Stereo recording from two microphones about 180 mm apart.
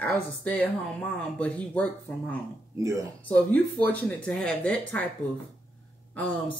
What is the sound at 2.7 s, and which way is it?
Speech, 20° right (ahead or behind).